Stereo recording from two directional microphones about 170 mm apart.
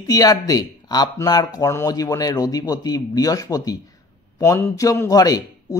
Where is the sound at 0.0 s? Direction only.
20° left (ahead or behind).